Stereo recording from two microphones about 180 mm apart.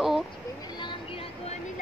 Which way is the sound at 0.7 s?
25° left (ahead or behind).